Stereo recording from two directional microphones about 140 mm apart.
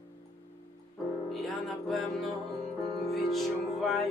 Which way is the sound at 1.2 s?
Centre (ahead or behind).